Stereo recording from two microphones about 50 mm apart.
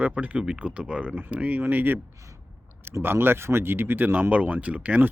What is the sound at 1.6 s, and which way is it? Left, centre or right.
Speech, right.